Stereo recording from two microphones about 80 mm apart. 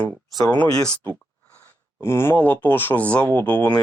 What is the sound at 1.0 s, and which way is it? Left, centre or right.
Speech, left.